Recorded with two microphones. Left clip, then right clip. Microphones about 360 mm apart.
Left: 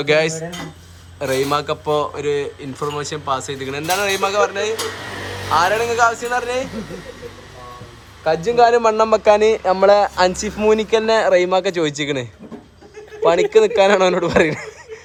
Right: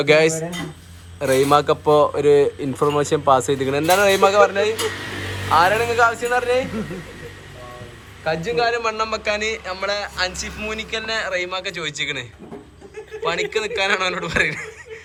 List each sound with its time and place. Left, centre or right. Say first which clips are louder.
0.0 s a man's voice: right 1 dB; centre
4.7 s a sound: even; left
5.5 s a man's voice: even; centre
8.2 s a man's voice: left 6 dB; centre